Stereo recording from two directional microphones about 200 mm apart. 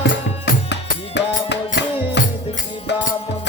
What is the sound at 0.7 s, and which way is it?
Music, 60° left (ahead or behind).